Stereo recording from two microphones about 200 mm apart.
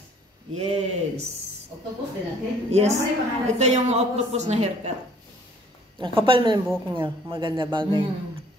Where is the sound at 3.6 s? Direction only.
35° right (ahead or behind).